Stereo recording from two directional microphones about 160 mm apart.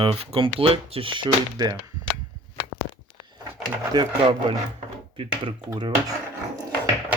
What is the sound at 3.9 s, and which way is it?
Speech, 25° right (ahead or behind).